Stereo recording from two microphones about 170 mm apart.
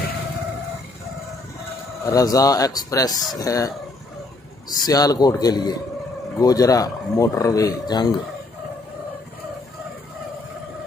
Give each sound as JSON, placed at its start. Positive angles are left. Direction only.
{"t": 2.0, "sound": "speech", "side_deg": 20}